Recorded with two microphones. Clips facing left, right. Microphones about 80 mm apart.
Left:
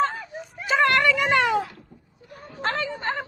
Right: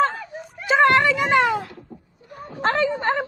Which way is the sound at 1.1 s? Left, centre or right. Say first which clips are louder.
Right 2 dB; centre.